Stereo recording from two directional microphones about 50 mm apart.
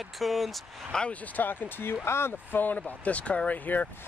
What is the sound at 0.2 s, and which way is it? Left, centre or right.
Speech, centre.